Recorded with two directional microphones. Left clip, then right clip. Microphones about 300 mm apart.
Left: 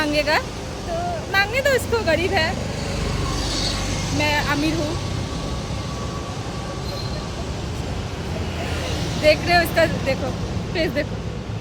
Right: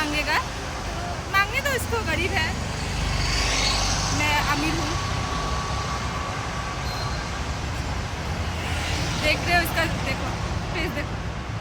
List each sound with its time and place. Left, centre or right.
0.0 s vehicle: centre
1.3 s speech: centre
3.5 s a sound: centre
4.2 s speech: centre
9.2 s speech: centre